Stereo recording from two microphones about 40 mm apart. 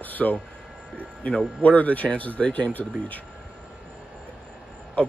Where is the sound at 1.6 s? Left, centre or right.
Left.